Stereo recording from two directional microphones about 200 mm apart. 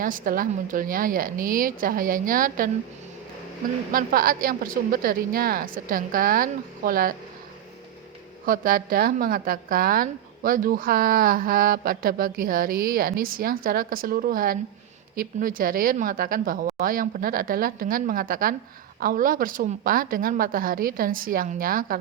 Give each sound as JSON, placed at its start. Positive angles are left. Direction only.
{"t": 0.0, "sound": "a woman's voice", "side_deg": -45}
{"t": 3.9, "sound": "a woman's voice", "side_deg": -45}
{"t": 8.4, "sound": "a woman's voice", "side_deg": -45}